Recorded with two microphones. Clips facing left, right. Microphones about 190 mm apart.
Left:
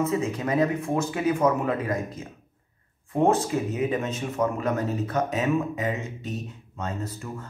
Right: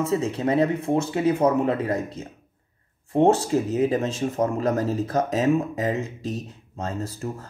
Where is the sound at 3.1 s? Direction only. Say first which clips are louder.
Right 3 dB; 30° right (ahead or behind).